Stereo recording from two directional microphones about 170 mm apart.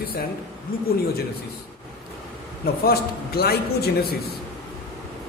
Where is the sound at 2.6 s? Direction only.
65° left (ahead or behind).